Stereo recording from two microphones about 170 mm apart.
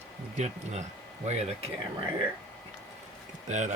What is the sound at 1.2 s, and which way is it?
Speech, 40° right (ahead or behind).